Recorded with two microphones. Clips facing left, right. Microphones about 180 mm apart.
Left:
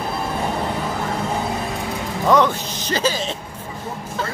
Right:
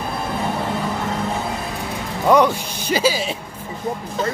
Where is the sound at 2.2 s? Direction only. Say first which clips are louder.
Right 2 dB; 10° right (ahead or behind).